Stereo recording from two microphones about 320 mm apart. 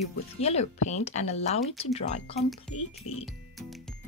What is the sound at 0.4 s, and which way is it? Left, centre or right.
Speech, centre.